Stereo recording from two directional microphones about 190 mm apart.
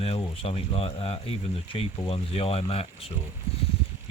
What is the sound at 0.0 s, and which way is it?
Speech, 30° left (ahead or behind).